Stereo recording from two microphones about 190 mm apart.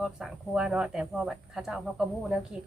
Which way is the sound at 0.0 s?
5° right (ahead or behind).